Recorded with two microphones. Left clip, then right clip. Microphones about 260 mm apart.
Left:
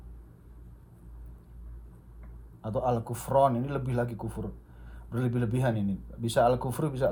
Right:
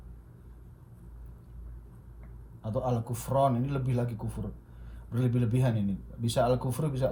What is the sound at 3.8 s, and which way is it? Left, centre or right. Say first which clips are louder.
Speech: left 3 dB; left.